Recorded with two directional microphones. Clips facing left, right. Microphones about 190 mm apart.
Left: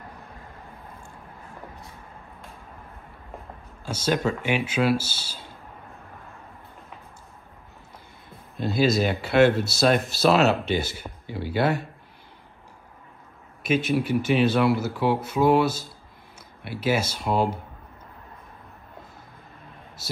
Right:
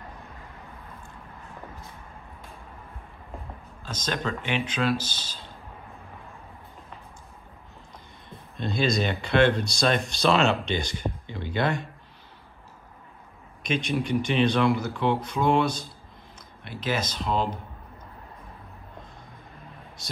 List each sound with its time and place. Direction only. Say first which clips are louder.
3.8 s speech: left 6 dB; 10° left (ahead or behind)
8.3 s speech: left 3 dB; 5° left (ahead or behind)
13.6 s speech: left 4 dB; 5° left (ahead or behind)
20.0 s a sound: left 5 dB; 5° left (ahead or behind)